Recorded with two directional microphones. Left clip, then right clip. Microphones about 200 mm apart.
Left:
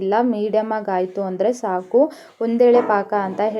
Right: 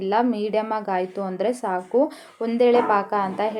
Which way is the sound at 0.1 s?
10° left (ahead or behind).